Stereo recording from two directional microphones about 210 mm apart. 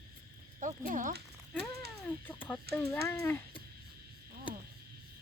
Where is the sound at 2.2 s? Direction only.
5° left (ahead or behind).